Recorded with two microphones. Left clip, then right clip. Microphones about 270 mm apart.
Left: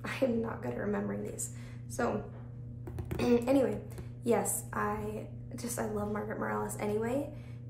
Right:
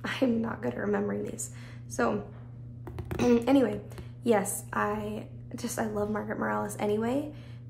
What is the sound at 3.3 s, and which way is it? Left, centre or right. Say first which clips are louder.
A woman's voice: right 3 dB; right.